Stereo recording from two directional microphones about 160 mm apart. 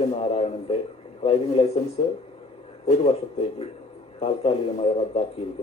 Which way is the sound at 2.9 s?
40° left (ahead or behind).